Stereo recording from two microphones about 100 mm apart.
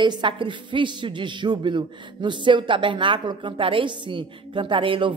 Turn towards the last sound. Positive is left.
turn(degrees=-60)  # may be behind; listen again after turning